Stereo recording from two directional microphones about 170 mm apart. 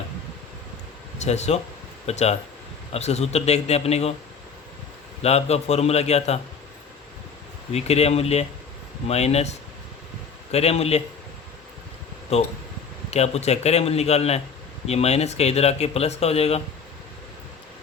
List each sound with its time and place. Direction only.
1.2 s speech: 40° left (ahead or behind)
5.2 s speech: 40° left (ahead or behind)
7.7 s speech: 40° left (ahead or behind)
13.1 s speech: 40° left (ahead or behind)